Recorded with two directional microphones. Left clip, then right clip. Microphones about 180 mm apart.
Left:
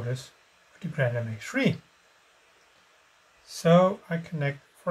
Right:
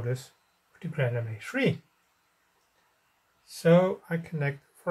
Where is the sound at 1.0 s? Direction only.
35° right (ahead or behind).